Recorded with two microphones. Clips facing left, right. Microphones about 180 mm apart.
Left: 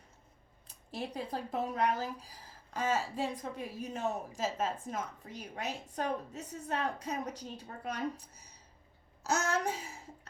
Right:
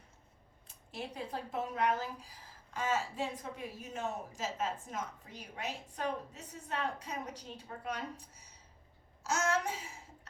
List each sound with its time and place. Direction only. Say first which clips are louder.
0.9 s a woman's voice: left 3 dB; 35° left (ahead or behind)
9.2 s a woman's voice: left 1 dB; 40° left (ahead or behind)